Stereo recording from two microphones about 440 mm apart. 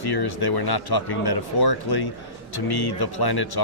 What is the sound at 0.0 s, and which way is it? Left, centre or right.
Speech, left.